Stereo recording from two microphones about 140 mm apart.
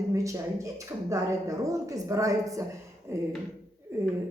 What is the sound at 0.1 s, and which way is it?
Speech, 20° right (ahead or behind).